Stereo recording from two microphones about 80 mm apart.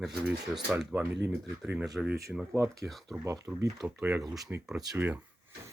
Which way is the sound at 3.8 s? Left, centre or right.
Right.